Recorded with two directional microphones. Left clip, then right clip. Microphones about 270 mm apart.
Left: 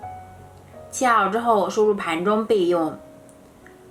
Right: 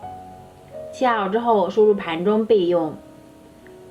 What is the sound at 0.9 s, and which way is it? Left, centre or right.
A woman's voice, left.